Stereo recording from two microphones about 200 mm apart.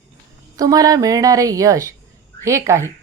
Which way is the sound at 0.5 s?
20° right (ahead or behind).